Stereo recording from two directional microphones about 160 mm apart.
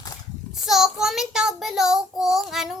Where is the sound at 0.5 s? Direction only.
Centre (ahead or behind).